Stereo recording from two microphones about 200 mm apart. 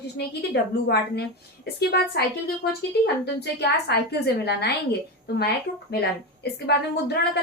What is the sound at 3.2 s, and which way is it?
A woman's voice, 55° left (ahead or behind).